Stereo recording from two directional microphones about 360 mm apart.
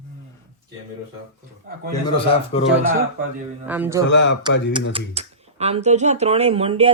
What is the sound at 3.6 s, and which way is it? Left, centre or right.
Speech, centre.